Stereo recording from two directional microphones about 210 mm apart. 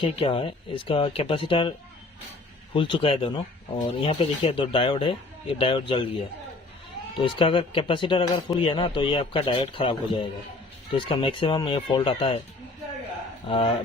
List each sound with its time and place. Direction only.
0.0 s speech: 25° left (ahead or behind)
2.7 s speech: 25° left (ahead or behind)
7.2 s speech: 25° left (ahead or behind)
13.5 s speech: 25° left (ahead or behind)